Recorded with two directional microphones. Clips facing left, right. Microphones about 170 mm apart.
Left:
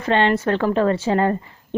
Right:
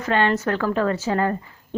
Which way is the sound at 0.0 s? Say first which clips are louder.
Left 2 dB; 25° left (ahead or behind).